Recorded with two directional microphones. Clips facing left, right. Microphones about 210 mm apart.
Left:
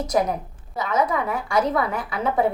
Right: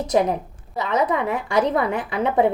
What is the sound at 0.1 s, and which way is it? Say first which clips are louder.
A woman's voice: right 4 dB; 25° right (ahead or behind).